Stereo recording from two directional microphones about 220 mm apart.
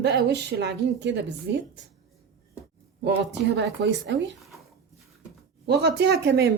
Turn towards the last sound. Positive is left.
turn(degrees=-50)  # may be behind; listen again after turning